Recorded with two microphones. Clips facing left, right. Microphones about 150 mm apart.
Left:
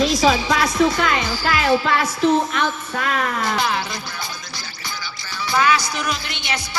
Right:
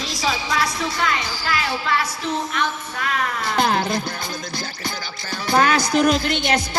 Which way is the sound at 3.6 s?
50° right (ahead or behind).